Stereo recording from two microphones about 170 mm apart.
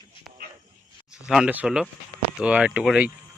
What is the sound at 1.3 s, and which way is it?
Speech, 5° right (ahead or behind).